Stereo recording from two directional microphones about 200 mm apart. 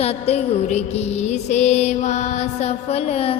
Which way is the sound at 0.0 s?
30° left (ahead or behind).